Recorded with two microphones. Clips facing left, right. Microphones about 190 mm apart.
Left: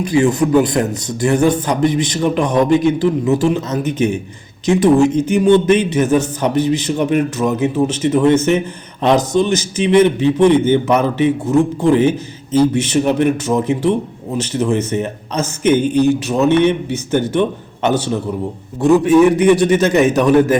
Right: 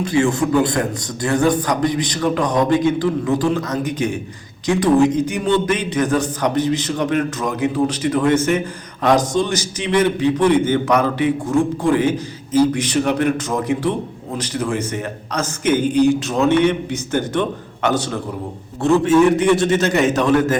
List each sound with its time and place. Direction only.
0.0 s a man's voice: 20° left (ahead or behind)
5.0 s speech: 15° right (ahead or behind)
5.3 s a man's voice: 20° left (ahead or behind)
15.9 s speech: 15° right (ahead or behind)
17.1 s a man's voice: 20° left (ahead or behind)